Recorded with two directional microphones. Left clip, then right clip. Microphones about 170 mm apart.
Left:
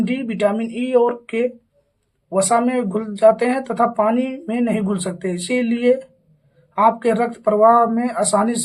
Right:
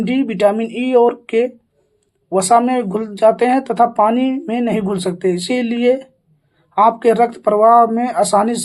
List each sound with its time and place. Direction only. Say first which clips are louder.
0.0 s speech: right 5 dB; 45° right (ahead or behind)